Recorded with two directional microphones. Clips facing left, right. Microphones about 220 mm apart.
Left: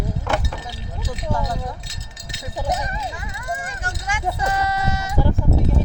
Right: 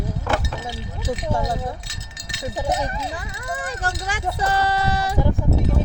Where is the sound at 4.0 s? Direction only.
35° right (ahead or behind).